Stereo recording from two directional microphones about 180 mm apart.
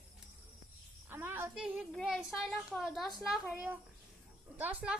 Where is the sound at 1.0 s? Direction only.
10° right (ahead or behind).